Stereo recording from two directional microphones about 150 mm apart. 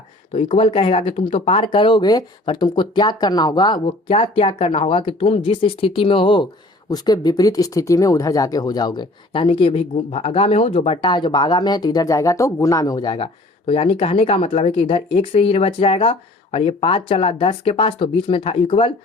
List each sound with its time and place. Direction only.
0.3 s speech: 45° left (ahead or behind)
3.8 s speech: 40° left (ahead or behind)